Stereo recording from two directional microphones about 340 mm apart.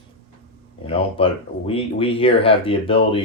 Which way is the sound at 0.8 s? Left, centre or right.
Centre.